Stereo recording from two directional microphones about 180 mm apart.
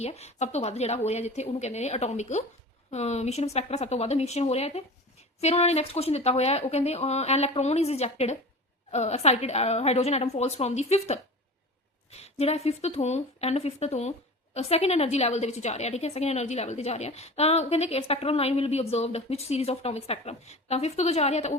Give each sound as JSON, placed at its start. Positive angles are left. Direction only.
{"t": 0.0, "sound": "a woman's voice", "side_deg": 35}